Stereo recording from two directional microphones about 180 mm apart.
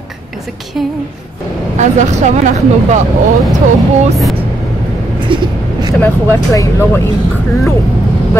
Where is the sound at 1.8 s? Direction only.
40° right (ahead or behind).